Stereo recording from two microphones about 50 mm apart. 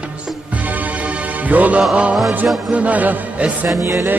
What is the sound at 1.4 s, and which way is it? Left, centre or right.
Music, right.